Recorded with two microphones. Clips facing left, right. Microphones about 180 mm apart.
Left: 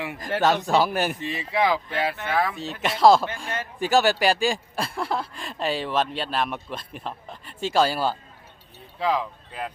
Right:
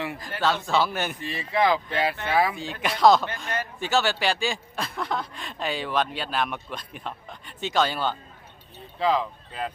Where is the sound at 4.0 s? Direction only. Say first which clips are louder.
Left 4 dB; 40° left (ahead or behind).